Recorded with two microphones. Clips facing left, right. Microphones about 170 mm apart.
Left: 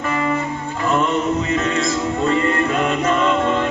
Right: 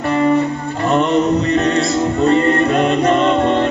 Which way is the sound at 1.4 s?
65° right (ahead or behind).